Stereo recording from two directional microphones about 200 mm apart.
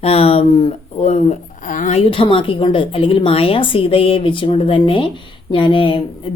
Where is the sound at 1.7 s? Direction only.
40° left (ahead or behind).